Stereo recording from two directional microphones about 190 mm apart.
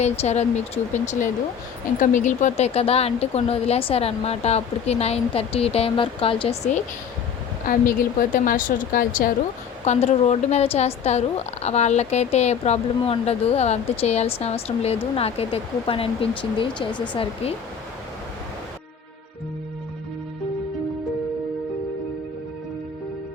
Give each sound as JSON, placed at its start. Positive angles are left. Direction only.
{"t": 0.0, "sound": "speech", "side_deg": 35}
{"t": 7.7, "sound": "a woman's voice", "side_deg": 45}
{"t": 9.8, "sound": "speech", "side_deg": 35}